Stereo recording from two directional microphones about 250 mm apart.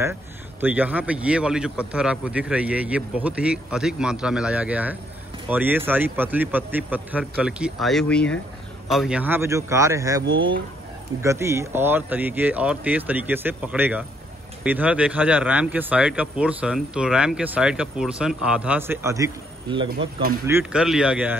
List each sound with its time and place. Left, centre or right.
0.6 s a man's voice: centre
19.9 s speech: right
20.4 s speech: centre